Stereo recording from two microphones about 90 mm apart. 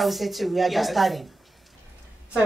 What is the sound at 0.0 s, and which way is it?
A woman's voice, centre (ahead or behind).